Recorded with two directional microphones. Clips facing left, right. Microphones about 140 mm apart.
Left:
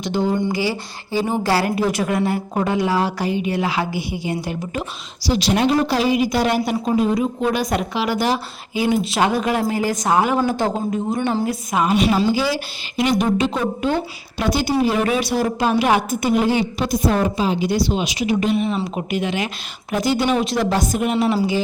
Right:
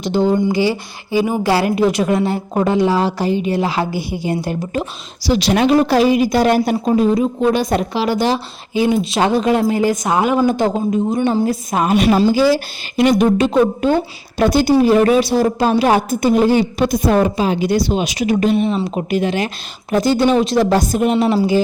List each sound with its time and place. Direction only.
0.0 s a woman's voice: 30° right (ahead or behind)
5.2 s a woman's voice: 65° right (ahead or behind); by 7.0 s 40° right (ahead or behind)
7.1 s a woman's voice: 30° right (ahead or behind)
11.4 s a woman's voice: 40° right (ahead or behind)
16.8 s a woman's voice: 55° right (ahead or behind); by 21.2 s 35° right (ahead or behind)